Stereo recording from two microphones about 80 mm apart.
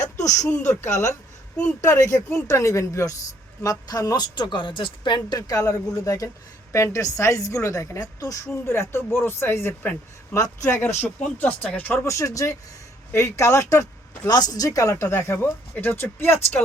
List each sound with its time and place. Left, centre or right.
0.2 s speech: left
5.4 s speech: left
10.3 s speech: left
10.8 s speech: left
12.0 s speech: left
14.3 s speech: left